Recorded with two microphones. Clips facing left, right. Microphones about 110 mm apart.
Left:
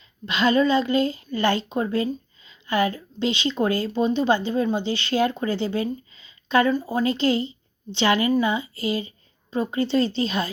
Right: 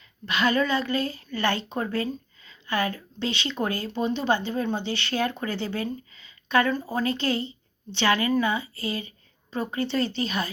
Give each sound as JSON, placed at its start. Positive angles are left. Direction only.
{"t": 0.3, "sound": "a woman's voice", "side_deg": 25}